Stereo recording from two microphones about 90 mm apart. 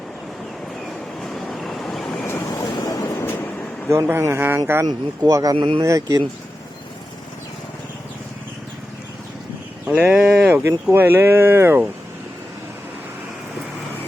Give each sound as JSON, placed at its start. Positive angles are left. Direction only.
{"t": 0.9, "sound": "vehicle", "side_deg": 5}
{"t": 2.5, "sound": "vehicle", "side_deg": 45}
{"t": 3.2, "sound": "train", "side_deg": 25}
{"t": 3.9, "sound": "a man's voice", "side_deg": -35}
{"t": 4.9, "sound": "speech", "side_deg": -45}
{"t": 5.5, "sound": "speech", "side_deg": -70}
{"t": 5.8, "sound": "speech", "side_deg": -35}
{"t": 9.8, "sound": "speech", "side_deg": -15}
{"t": 10.9, "sound": "a man's voice", "side_deg": -25}